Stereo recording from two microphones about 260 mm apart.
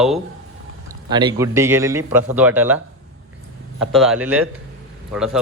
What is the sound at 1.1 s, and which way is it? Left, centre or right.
A man's voice, centre.